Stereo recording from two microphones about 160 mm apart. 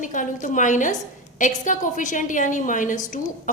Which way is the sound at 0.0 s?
55° left (ahead or behind).